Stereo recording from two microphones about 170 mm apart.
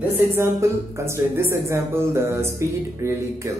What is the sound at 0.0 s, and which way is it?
A woman's voice, 15° right (ahead or behind).